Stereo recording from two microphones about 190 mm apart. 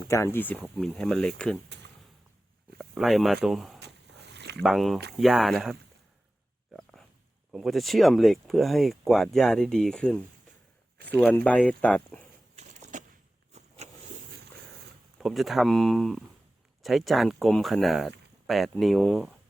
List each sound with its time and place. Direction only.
0.1 s speech: 15° left (ahead or behind)
2.7 s speech: centre (ahead or behind)
4.4 s a sound: 65° right (ahead or behind)
4.6 s speech: centre (ahead or behind)
7.5 s speech: centre (ahead or behind)
12.5 s a sound: 40° right (ahead or behind)
13.5 s vehicle: 35° right (ahead or behind)
15.2 s speech: centre (ahead or behind)